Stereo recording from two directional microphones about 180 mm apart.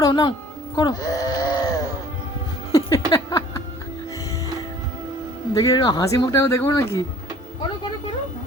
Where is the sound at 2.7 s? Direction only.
20° left (ahead or behind).